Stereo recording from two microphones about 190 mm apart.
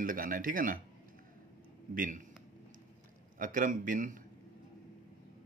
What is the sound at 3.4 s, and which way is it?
Speech, 45° right (ahead or behind).